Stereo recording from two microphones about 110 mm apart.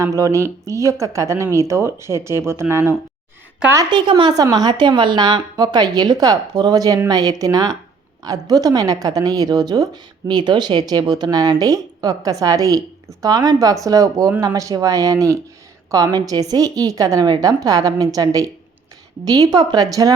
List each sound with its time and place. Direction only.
0.0 s speech: 30° right (ahead or behind)
3.8 s a woman's voice: 45° right (ahead or behind)